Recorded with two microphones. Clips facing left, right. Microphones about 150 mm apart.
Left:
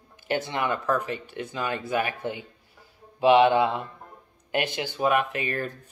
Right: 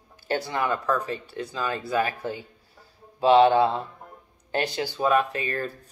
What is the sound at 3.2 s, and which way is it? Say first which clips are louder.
Speech: right 1 dB; 35° right (ahead or behind).